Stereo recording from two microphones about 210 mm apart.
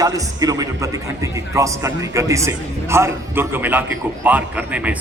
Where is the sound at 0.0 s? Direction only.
15° right (ahead or behind).